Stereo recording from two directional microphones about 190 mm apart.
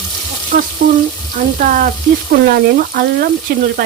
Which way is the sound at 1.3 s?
45° right (ahead or behind).